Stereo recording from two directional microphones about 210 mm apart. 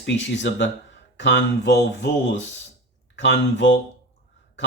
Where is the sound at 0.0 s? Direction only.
60° left (ahead or behind).